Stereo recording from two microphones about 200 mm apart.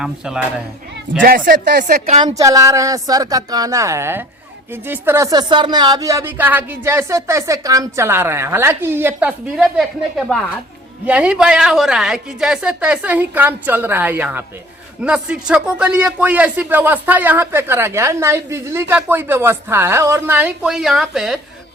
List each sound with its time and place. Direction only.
1.2 s speech: 45° right (ahead or behind)
2.2 s a man's voice: 20° right (ahead or behind); by 21.3 s centre (ahead or behind)